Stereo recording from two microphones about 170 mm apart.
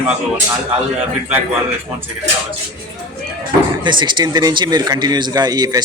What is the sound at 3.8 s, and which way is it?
A man's voice, 25° right (ahead or behind).